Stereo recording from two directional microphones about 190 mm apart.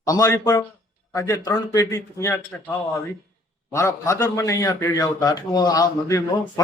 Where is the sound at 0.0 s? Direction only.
20° left (ahead or behind).